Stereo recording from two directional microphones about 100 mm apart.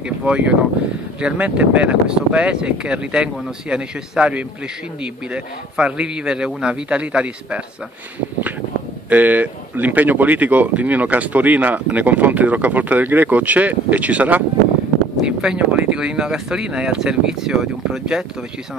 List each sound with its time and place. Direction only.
0.0 s speech: 10° right (ahead or behind)
9.1 s speech: 15° right (ahead or behind)